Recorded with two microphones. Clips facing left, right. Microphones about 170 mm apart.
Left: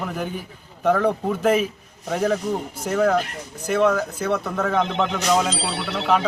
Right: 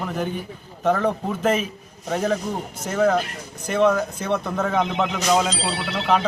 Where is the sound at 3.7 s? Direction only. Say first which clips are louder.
Even; 10° left (ahead or behind).